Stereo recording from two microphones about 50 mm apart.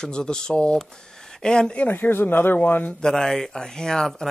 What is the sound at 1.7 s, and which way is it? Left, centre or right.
Speech, left.